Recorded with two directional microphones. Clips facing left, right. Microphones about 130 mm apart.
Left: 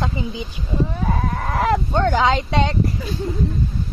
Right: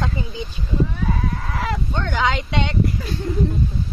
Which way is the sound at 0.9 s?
40° left (ahead or behind).